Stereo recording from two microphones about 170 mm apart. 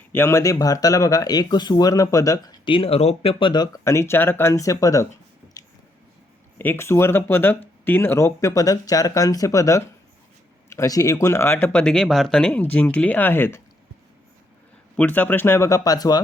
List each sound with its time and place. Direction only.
0.1 s speech: 15° left (ahead or behind)
6.6 s speech: 15° left (ahead or behind)
14.9 s speech: 10° left (ahead or behind)